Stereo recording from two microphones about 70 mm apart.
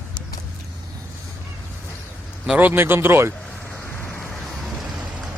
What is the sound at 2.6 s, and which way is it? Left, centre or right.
Speech, right.